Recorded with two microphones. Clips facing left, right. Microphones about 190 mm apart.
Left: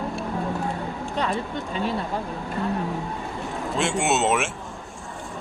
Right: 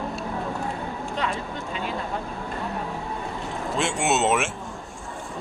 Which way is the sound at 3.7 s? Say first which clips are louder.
Left 1 dB; centre (ahead or behind).